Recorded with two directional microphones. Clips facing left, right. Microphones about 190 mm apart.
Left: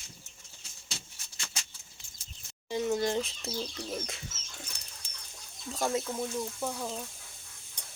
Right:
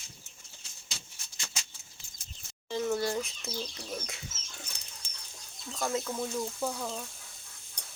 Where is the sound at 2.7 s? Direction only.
15° left (ahead or behind).